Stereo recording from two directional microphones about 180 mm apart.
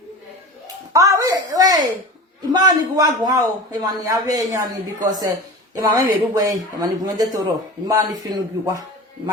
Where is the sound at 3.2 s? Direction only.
20° right (ahead or behind).